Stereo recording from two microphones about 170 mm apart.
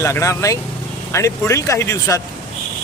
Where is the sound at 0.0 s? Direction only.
15° left (ahead or behind).